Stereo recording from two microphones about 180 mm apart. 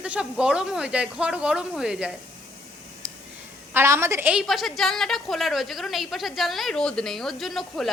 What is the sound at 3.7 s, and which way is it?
A woman's voice, 15° right (ahead or behind).